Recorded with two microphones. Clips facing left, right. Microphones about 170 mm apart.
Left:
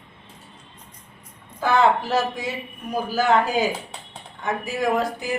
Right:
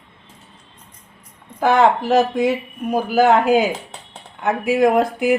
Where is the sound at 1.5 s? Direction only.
55° right (ahead or behind).